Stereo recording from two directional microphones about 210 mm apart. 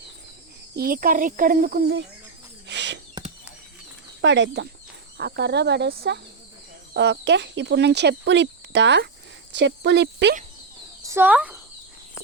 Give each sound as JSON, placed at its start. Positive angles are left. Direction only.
{"t": 0.8, "sound": "a child's voice", "side_deg": -45}
{"t": 2.6, "sound": "a sound", "side_deg": -55}
{"t": 4.2, "sound": "a child's voice", "side_deg": -60}
{"t": 11.0, "sound": "speech", "side_deg": -10}